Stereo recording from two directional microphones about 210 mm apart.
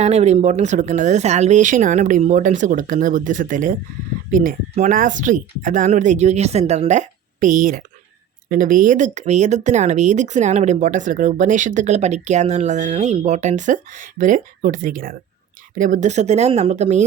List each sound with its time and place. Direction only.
0.0 s speech: 30° right (ahead or behind)